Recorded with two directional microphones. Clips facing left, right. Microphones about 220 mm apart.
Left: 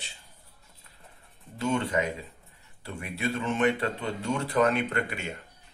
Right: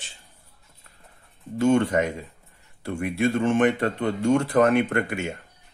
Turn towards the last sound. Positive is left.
turn(degrees=-50)  # may be behind; listen again after turning